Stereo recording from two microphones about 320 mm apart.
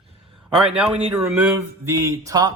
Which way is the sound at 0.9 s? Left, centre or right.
Centre.